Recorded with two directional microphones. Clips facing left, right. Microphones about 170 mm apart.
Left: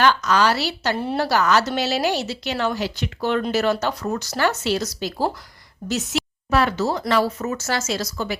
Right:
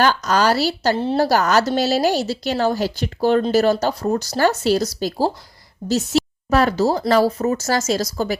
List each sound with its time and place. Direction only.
0.0 s speech: 40° right (ahead or behind)